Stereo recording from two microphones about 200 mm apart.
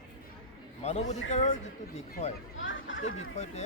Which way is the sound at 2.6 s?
75° left (ahead or behind).